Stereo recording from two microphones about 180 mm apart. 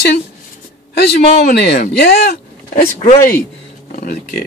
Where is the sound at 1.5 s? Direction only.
50° left (ahead or behind).